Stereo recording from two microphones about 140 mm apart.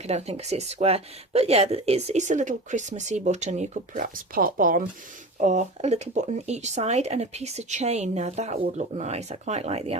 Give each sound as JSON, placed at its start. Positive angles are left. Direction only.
{"t": 0.1, "sound": "speech", "side_deg": -50}
{"t": 5.4, "sound": "speech", "side_deg": -60}